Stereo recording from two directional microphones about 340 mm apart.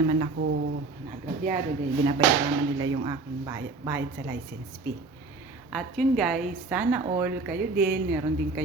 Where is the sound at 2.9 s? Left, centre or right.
Centre.